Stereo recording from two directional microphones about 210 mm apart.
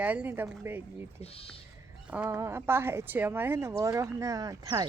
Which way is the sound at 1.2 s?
25° left (ahead or behind).